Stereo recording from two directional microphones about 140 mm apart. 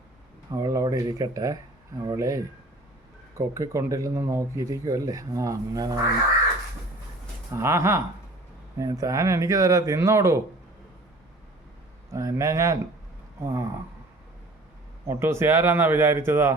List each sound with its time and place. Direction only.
0.5 s speech: 25° right (ahead or behind)
7.5 s speech: 20° right (ahead or behind)
12.1 s speech: 20° right (ahead or behind)
15.0 s a man's voice: 20° right (ahead or behind)